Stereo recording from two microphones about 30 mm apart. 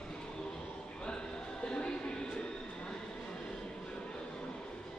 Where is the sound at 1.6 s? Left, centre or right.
Left.